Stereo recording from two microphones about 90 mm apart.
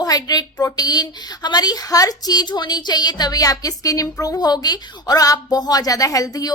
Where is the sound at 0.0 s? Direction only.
45° left (ahead or behind).